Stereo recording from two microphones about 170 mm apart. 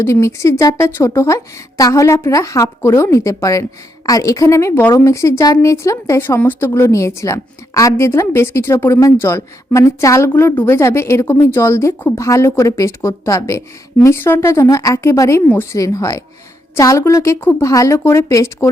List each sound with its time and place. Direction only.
0.0 s speech: 15° left (ahead or behind)